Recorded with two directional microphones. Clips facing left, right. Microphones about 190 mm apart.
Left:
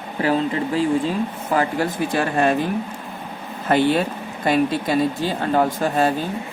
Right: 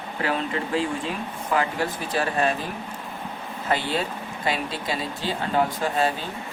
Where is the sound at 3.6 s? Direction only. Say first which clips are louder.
Left 8 dB; 55° left (ahead or behind).